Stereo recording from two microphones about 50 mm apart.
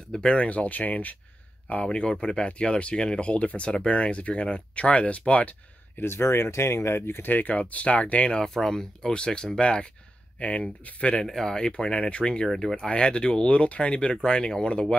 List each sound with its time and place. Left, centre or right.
0.1 s speech: centre
5.9 s speech: left
7.0 s speech: left
7.3 s speech: left
11.2 s speech: centre
12.4 s speech: centre
12.8 s speech: centre